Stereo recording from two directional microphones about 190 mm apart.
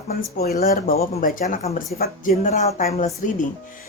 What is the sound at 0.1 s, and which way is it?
Speech, 55° left (ahead or behind).